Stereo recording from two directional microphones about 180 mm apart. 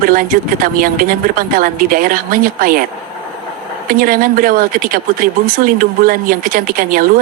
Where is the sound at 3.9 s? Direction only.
50° right (ahead or behind).